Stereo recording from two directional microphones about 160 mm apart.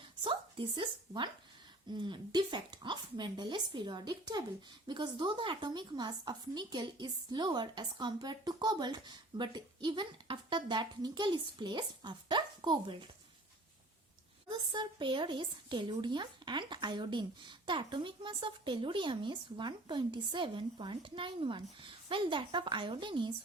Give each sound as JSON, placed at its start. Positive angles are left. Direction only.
{"t": 0.3, "sound": "a woman's voice", "side_deg": -30}
{"t": 14.4, "sound": "a woman's voice", "side_deg": -30}